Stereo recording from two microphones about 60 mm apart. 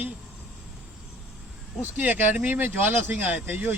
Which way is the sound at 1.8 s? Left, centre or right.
Right.